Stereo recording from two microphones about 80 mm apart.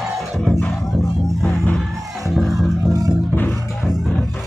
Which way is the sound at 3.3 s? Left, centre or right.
Left.